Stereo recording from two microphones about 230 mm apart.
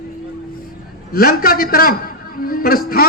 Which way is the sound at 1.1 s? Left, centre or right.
Left.